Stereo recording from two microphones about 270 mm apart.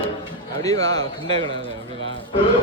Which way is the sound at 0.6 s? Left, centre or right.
Centre.